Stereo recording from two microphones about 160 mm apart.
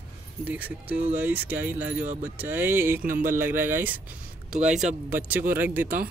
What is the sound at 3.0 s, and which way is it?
Speech, 60° right (ahead or behind).